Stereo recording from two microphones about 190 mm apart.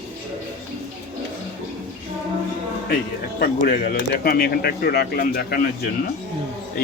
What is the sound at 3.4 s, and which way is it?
Speech, 50° left (ahead or behind).